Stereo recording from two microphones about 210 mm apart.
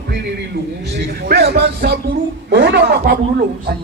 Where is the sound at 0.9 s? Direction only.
55° right (ahead or behind).